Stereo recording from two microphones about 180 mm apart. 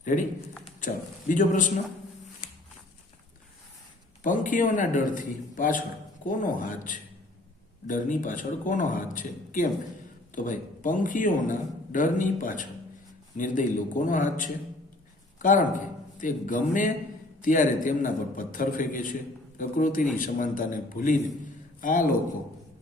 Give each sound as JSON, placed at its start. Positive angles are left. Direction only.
{"t": 0.0, "sound": "speech", "side_deg": 45}
{"t": 1.3, "sound": "a man's voice", "side_deg": 45}
{"t": 4.2, "sound": "a man's voice", "side_deg": 45}